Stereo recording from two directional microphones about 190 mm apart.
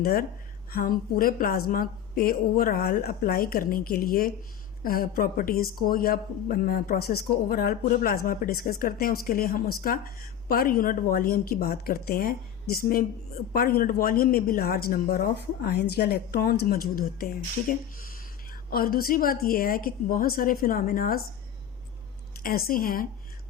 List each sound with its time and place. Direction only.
0.0 s a woman's voice: 50° left (ahead or behind)
22.4 s a woman's voice: 50° left (ahead or behind)